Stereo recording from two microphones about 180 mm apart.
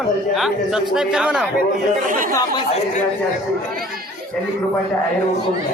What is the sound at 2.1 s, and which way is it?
Speech, 50° right (ahead or behind).